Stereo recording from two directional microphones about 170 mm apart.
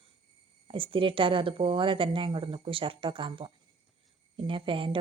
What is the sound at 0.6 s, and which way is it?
Speech, 30° right (ahead or behind).